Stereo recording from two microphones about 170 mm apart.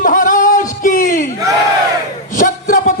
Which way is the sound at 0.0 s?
50° left (ahead or behind).